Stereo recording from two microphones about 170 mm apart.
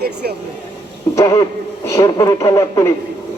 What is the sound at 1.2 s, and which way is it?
Speech, 20° left (ahead or behind).